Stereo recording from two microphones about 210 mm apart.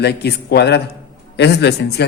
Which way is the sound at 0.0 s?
50° left (ahead or behind).